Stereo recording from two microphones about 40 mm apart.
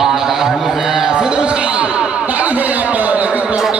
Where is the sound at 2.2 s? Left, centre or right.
Right.